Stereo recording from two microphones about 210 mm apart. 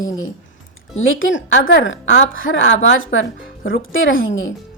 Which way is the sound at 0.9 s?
70° left (ahead or behind).